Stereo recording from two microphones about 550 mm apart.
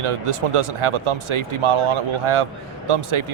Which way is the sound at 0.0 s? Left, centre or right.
Right.